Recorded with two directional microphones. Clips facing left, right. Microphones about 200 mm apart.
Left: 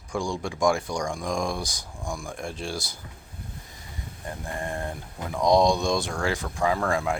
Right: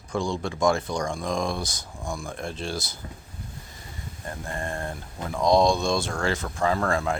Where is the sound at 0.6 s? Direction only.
15° left (ahead or behind).